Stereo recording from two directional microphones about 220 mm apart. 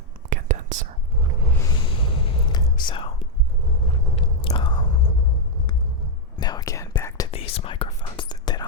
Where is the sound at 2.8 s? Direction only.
25° left (ahead or behind).